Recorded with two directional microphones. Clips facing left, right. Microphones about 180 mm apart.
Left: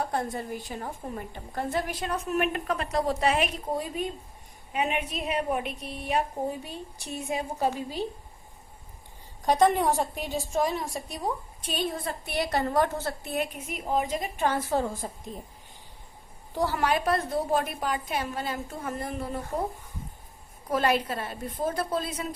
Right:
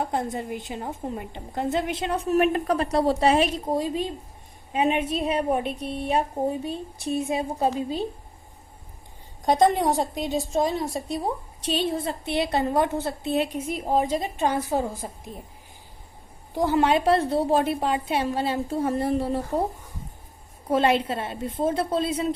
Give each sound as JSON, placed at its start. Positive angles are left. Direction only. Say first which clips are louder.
{"t": 0.0, "sound": "a woman's voice", "louder": "right 3 dB", "side_deg": -20}
{"t": 9.8, "sound": "a woman's voice", "louder": "right 3 dB", "side_deg": -20}
{"t": 13.3, "sound": "a woman's voice", "louder": "right 8 dB", "side_deg": -30}
{"t": 14.4, "sound": "a woman's voice", "louder": "right 1 dB", "side_deg": -15}
{"t": 16.6, "sound": "a woman's voice", "louder": "right 5 dB", "side_deg": -20}
{"t": 20.7, "sound": "a woman's voice", "louder": "right 4 dB", "side_deg": -25}